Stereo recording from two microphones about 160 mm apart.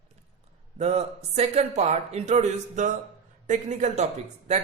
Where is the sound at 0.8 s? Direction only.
40° right (ahead or behind).